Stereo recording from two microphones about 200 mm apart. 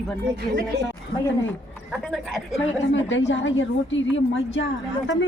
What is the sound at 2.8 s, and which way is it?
A woman's voice, 70° left (ahead or behind).